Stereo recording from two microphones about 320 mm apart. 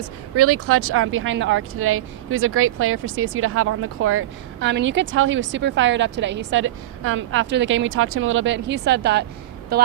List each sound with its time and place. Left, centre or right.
0.3 s speech: right